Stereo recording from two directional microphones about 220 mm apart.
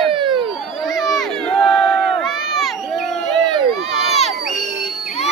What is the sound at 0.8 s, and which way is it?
Crowd, centre (ahead or behind).